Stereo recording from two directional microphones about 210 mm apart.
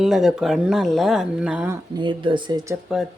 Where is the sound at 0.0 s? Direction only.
Centre (ahead or behind).